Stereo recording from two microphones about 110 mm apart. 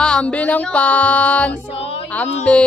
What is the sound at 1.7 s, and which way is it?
Music, 60° left (ahead or behind).